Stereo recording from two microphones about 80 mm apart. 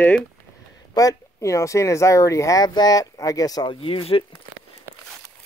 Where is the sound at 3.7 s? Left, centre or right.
Left.